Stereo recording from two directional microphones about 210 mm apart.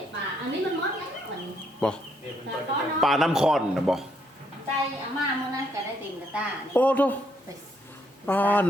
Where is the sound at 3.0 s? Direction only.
Centre (ahead or behind).